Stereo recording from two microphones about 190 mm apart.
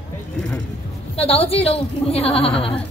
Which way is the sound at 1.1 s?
30° left (ahead or behind).